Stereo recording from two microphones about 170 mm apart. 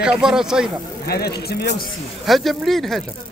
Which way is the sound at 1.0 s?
70° left (ahead or behind).